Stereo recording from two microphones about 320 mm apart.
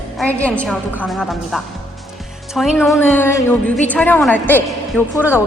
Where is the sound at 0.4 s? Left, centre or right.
Centre.